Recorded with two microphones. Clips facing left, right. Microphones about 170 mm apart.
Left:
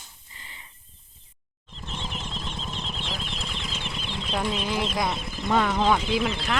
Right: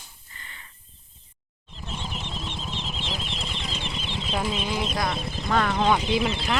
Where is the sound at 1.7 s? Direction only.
5° right (ahead or behind).